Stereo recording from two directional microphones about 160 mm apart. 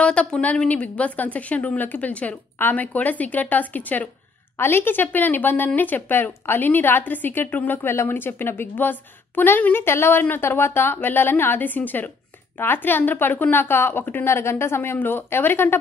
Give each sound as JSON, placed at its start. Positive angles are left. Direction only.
{"t": 0.0, "sound": "a woman's voice", "side_deg": 5}